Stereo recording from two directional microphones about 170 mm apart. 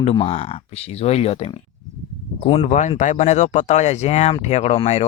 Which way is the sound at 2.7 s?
45° left (ahead or behind).